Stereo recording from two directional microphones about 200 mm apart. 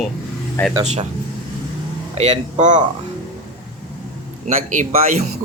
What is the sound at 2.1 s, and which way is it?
Speech, 30° right (ahead or behind).